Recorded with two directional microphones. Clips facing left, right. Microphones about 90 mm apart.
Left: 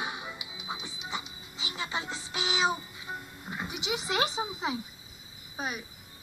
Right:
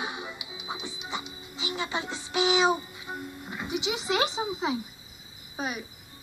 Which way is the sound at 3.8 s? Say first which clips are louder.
Right 2 dB; 40° left (ahead or behind).